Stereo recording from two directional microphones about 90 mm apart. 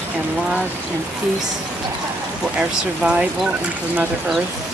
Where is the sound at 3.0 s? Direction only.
10° right (ahead or behind).